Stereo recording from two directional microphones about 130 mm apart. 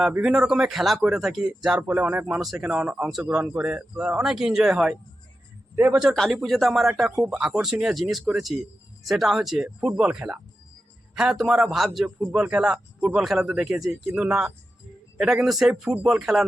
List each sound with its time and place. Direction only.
0.1 s speech: 5° right (ahead or behind)
3.2 s speech: 15° right (ahead or behind)
5.7 s a man's voice: 15° right (ahead or behind)
6.0 s speech: centre (ahead or behind)